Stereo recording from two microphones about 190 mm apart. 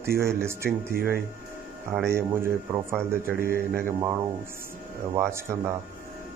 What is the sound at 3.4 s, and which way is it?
Speech, 50° right (ahead or behind).